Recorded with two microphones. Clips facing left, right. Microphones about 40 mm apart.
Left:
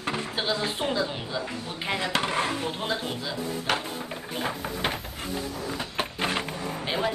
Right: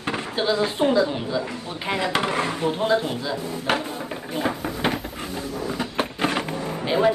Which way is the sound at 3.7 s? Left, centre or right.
Centre.